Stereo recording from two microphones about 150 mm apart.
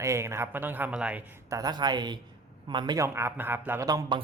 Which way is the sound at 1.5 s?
25° right (ahead or behind).